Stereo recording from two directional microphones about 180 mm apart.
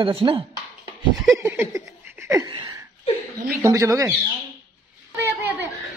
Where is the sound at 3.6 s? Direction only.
15° right (ahead or behind).